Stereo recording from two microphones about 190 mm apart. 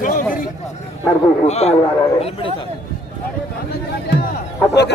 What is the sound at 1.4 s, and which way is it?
A man's voice, 35° left (ahead or behind).